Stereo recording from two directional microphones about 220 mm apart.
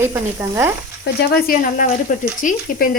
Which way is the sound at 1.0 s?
40° left (ahead or behind).